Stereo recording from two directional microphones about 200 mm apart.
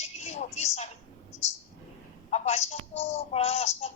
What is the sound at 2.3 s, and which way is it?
A woman's voice, 35° left (ahead or behind).